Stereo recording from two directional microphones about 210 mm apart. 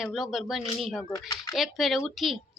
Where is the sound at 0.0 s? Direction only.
Centre (ahead or behind).